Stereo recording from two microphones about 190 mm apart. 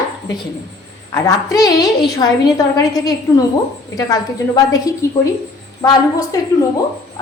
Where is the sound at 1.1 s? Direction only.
20° left (ahead or behind).